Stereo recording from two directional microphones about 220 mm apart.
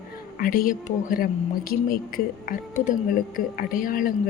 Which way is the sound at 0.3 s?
40° left (ahead or behind).